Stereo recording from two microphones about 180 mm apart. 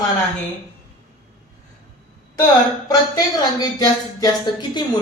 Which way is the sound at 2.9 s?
20° left (ahead or behind).